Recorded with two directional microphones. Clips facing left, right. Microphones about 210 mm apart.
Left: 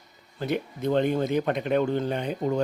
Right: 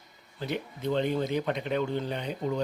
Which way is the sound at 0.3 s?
50° left (ahead or behind).